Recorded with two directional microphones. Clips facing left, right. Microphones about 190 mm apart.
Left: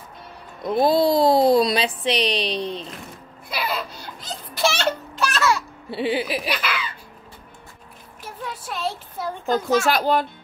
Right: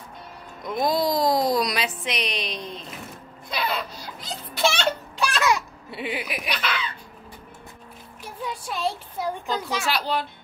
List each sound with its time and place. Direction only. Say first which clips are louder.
0.6 s a woman's voice: left 6 dB; 30° left (ahead or behind)
3.4 s speech: left 1 dB; 5° left (ahead or behind)
4.6 s a sound: left 1 dB; 5° left (ahead or behind)
5.3 s babbling: left 1 dB; 15° right (ahead or behind)
5.9 s a woman's voice: left 8 dB; 30° left (ahead or behind)
6.5 s speech: left 2 dB; 5° left (ahead or behind)
8.2 s speech: right 1 dB; centre (ahead or behind)
9.5 s a child's voice: left 11 dB; 50° left (ahead or behind)